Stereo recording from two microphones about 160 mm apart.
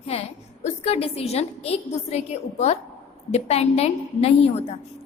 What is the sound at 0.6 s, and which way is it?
A woman's voice, 40° left (ahead or behind).